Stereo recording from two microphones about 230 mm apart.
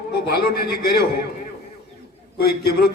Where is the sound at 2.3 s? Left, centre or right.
Left.